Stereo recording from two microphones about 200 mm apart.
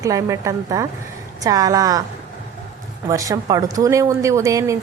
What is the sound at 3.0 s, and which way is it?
A woman's voice, 15° right (ahead or behind).